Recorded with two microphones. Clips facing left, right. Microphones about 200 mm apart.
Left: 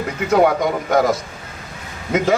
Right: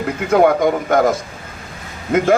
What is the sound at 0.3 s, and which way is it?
Speech, 50° right (ahead or behind).